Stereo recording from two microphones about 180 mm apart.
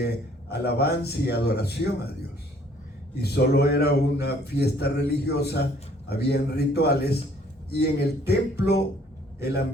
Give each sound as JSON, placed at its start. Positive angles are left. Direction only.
{"t": 0.0, "sound": "a man's voice", "side_deg": 65}
{"t": 3.2, "sound": "a man's voice", "side_deg": 60}